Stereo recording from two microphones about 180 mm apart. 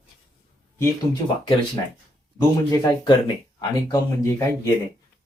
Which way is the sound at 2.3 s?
25° left (ahead or behind).